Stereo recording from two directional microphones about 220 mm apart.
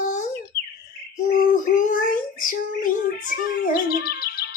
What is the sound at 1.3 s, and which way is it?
Child singing, 40° left (ahead or behind).